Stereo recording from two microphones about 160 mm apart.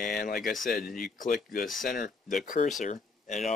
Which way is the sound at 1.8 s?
60° left (ahead or behind).